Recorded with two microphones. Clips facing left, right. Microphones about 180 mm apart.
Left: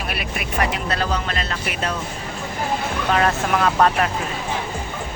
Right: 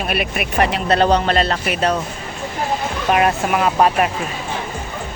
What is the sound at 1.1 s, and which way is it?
Speech, 70° right (ahead or behind).